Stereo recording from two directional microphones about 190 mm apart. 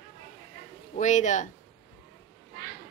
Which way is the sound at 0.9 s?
40° left (ahead or behind).